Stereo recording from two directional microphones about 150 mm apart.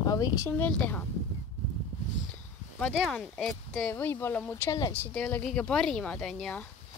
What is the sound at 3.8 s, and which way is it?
Speech, 15° left (ahead or behind).